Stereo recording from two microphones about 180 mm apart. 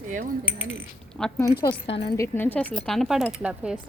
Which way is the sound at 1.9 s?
30° left (ahead or behind).